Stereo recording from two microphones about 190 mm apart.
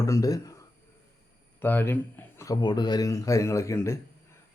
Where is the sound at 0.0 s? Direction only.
20° left (ahead or behind).